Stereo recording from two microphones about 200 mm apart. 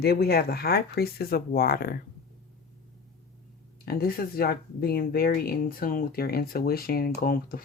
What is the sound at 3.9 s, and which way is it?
Speech, 50° left (ahead or behind).